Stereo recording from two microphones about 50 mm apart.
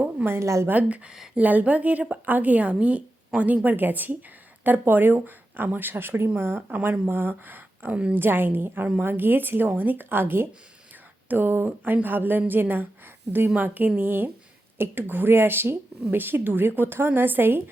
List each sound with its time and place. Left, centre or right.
0.3 s a woman's voice: right
0.7 s a woman's voice: right
6.7 s a woman's voice: right